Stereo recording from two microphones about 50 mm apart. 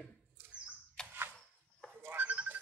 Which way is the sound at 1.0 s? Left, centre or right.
Centre.